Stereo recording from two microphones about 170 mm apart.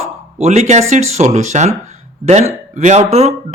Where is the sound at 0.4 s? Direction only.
40° right (ahead or behind).